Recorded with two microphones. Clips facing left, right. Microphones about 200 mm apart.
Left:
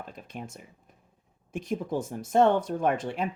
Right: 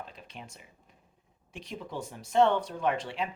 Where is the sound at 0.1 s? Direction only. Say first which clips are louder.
Left 7 dB; 50° left (ahead or behind).